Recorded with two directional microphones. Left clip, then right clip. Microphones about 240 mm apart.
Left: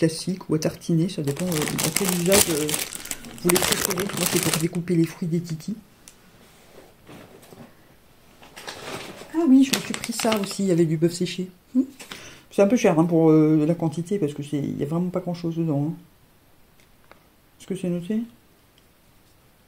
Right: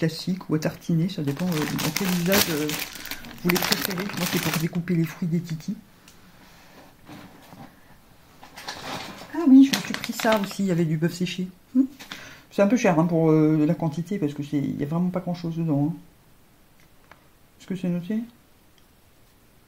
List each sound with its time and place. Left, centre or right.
0.0 s speech: left
3.7 s speech: left
4.2 s speech: left
9.5 s speech: left
17.6 s speech: left